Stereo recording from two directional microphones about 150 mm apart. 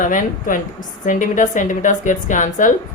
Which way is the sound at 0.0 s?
60° left (ahead or behind).